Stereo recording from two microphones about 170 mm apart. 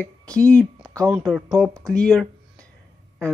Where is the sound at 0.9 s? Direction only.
10° right (ahead or behind).